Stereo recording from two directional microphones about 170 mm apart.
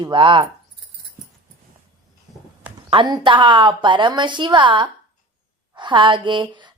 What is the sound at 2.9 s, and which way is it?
Speech, 25° right (ahead or behind).